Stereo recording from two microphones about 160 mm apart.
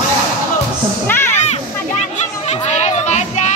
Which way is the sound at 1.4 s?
45° left (ahead or behind).